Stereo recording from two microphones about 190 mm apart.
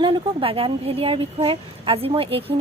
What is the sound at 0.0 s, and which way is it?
Speech, 30° right (ahead or behind).